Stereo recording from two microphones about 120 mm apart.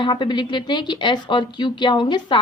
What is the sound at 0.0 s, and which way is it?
A woman's voice, 40° left (ahead or behind).